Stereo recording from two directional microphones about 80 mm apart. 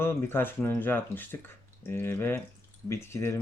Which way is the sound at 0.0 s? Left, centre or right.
Left.